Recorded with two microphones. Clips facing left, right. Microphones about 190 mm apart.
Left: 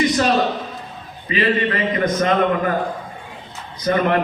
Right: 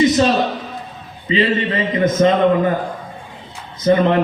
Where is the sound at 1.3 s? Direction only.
25° right (ahead or behind).